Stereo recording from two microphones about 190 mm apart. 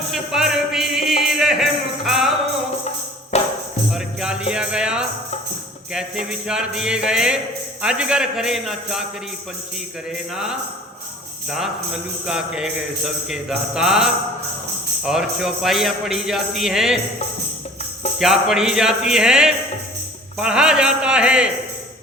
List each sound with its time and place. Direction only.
0.1 s music: centre (ahead or behind)
3.3 s music: 35° left (ahead or behind)
3.9 s music: 5° right (ahead or behind)
6.5 s speech: 5° right (ahead or behind)
10.3 s speech: 5° right (ahead or behind)
12.2 s speech: 5° right (ahead or behind)
18.2 s speech: centre (ahead or behind)